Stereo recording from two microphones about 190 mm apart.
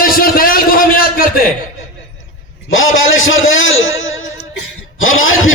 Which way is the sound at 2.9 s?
90° left.